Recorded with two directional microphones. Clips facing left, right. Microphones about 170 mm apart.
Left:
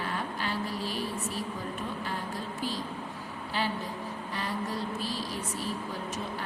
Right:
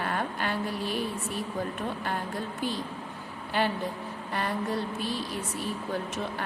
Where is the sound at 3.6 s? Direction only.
60° right (ahead or behind).